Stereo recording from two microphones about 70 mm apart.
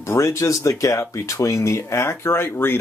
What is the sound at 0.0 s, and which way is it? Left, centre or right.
Speech, left.